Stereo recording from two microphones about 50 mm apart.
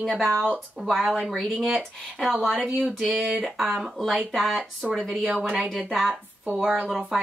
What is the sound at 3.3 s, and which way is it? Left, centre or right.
Speech, centre.